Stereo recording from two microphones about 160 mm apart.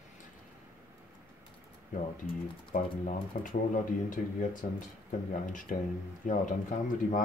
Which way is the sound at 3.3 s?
50° left (ahead or behind).